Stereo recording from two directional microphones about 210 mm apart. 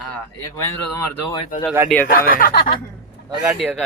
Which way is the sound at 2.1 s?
40° left (ahead or behind).